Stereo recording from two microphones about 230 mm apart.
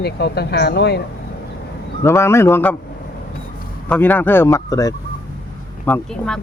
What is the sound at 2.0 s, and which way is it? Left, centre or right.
Speech, centre.